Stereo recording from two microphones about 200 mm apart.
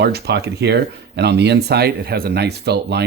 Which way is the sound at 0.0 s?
55° right (ahead or behind).